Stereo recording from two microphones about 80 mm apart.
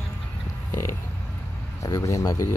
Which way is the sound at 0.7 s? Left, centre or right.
Left.